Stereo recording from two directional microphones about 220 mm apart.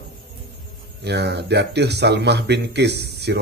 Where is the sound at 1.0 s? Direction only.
50° right (ahead or behind).